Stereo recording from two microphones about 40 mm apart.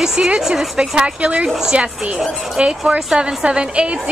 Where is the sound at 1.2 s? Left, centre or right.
Right.